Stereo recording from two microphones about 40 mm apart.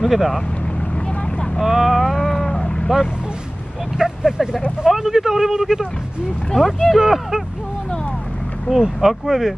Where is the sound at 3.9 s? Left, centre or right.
Centre.